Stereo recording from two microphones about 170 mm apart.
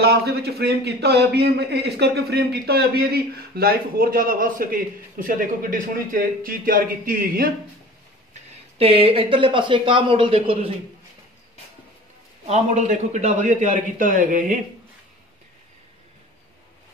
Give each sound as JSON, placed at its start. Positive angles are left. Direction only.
{"t": 0.0, "sound": "a man's voice", "side_deg": -70}
{"t": 8.7, "sound": "speech", "side_deg": -35}
{"t": 12.4, "sound": "a man's voice", "side_deg": -45}